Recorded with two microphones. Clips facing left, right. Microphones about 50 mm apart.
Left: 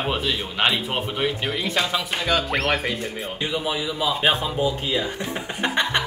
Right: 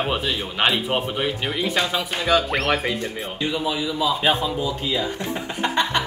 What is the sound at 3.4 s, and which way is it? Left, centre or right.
A man's voice, centre.